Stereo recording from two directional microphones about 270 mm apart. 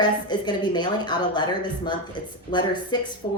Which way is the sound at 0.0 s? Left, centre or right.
Centre.